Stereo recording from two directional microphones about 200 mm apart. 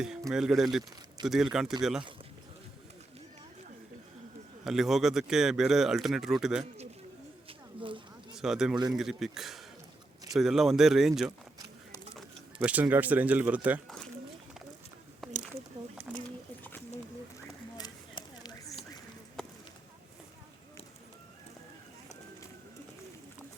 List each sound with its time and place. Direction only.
0.0 s speech: 5° right (ahead or behind)
4.6 s speech: centre (ahead or behind)
7.8 s a sound: 25° right (ahead or behind)
8.4 s speech: centre (ahead or behind)
8.7 s a man's voice: 20° right (ahead or behind)
9.0 s speech: centre (ahead or behind)
12.6 s speech: 10° right (ahead or behind)
15.2 s a sound: centre (ahead or behind)
17.7 s a sound: 20° left (ahead or behind)